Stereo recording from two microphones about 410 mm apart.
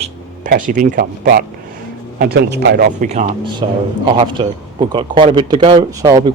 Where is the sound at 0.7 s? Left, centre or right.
Centre.